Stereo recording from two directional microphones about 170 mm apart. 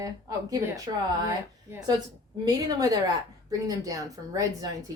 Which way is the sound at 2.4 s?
20° right (ahead or behind).